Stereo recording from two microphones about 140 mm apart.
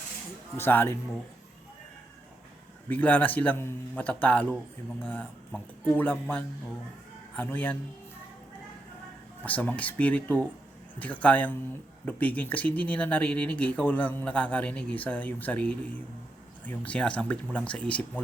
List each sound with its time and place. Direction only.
0.5 s speech: 15° left (ahead or behind)
2.9 s speech: 10° left (ahead or behind)
9.4 s speech: 10° left (ahead or behind)